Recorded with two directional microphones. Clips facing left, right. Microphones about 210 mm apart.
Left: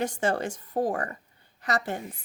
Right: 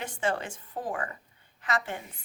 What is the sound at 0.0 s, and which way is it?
Speech, 40° left (ahead or behind).